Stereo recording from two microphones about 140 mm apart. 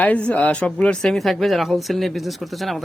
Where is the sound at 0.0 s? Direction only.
10° left (ahead or behind).